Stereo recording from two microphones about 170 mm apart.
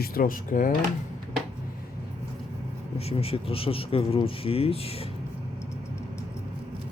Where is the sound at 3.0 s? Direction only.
35° left (ahead or behind).